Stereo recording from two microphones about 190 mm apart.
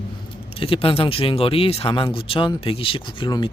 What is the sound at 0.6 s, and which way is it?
Speech, 30° left (ahead or behind).